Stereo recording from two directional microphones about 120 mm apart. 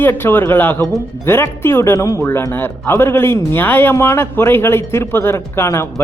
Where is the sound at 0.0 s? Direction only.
20° left (ahead or behind).